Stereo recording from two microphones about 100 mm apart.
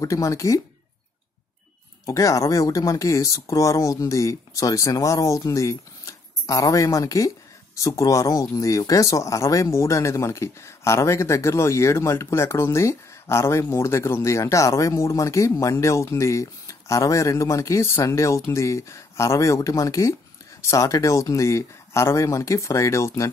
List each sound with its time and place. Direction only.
0.0 s speech: 35° left (ahead or behind)
2.0 s speech: 35° left (ahead or behind)